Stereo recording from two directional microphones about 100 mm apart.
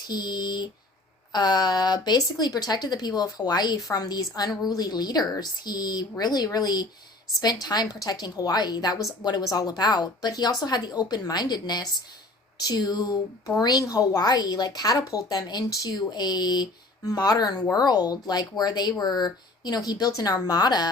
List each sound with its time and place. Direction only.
0.1 s speech: 45° left (ahead or behind)